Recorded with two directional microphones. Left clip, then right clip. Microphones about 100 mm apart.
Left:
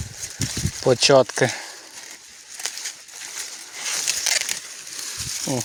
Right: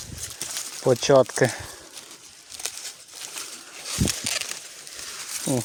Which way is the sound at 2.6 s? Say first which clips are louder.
Left 4 dB; 40° right (ahead or behind).